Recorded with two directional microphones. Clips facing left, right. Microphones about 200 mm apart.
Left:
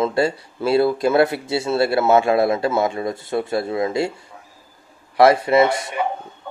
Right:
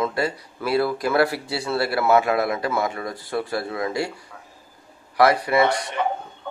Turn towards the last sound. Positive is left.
turn(degrees=10)  # may be behind; listen again after turning